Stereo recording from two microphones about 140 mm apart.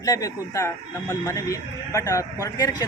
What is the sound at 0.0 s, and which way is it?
A man's voice, 25° left (ahead or behind).